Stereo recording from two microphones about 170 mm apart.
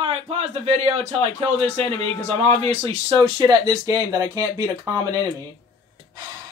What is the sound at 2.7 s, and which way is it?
Speech, 35° right (ahead or behind).